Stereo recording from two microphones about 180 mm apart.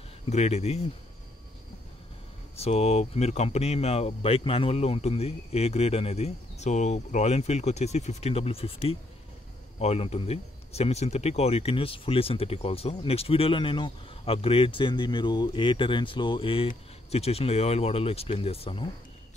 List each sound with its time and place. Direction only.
0.3 s speech: 40° left (ahead or behind)
2.6 s speech: 35° left (ahead or behind)